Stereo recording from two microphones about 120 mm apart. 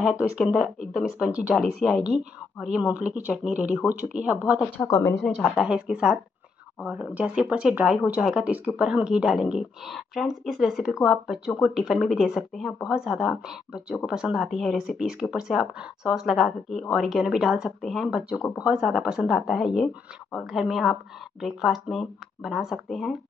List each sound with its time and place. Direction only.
0.0 s speech: 10° right (ahead or behind)
4.8 s a woman's voice: 25° left (ahead or behind)
5.2 s speech: 5° left (ahead or behind)
5.7 s speech: 10° right (ahead or behind)